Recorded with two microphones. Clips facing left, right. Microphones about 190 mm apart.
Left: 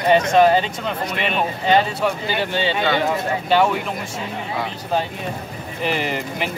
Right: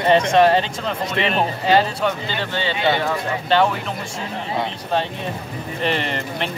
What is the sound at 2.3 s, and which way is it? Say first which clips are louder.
Speech: left 3 dB; 15° left (ahead or behind).